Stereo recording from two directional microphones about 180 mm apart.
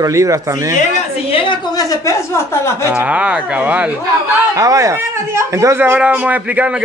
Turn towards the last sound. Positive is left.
turn(degrees=-10)  # may be behind; listen again after turning